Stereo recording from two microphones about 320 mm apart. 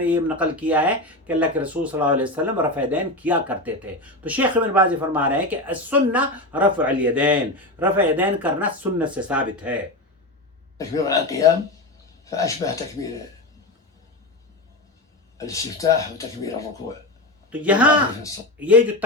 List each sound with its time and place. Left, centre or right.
0.0 s speech: centre
10.8 s speech: centre
15.4 s speech: centre
17.5 s speech: centre